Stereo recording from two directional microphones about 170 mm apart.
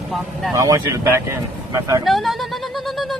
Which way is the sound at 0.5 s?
20° right (ahead or behind).